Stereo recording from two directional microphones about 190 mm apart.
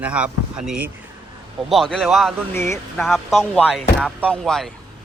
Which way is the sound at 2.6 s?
15° left (ahead or behind).